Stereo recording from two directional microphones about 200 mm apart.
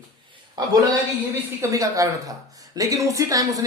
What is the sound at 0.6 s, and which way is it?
A man's voice, 20° right (ahead or behind).